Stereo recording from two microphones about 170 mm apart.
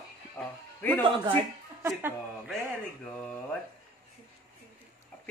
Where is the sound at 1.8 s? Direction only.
15° right (ahead or behind).